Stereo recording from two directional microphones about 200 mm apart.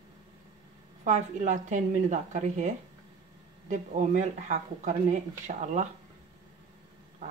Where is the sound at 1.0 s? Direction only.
35° right (ahead or behind).